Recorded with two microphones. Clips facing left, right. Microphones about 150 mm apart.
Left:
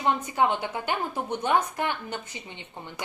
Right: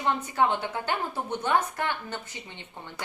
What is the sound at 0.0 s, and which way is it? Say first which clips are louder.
A woman's voice: left 1 dB; 15° left (ahead or behind).